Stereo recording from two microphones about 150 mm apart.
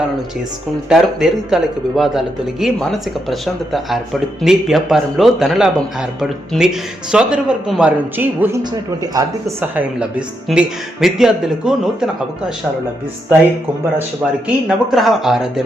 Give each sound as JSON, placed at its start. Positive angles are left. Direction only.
{"t": 0.9, "sound": "a man's voice", "side_deg": -5}
{"t": 8.7, "sound": "speech", "side_deg": -25}
{"t": 9.7, "sound": "a man's voice", "side_deg": -10}
{"t": 14.4, "sound": "a man's voice", "side_deg": 0}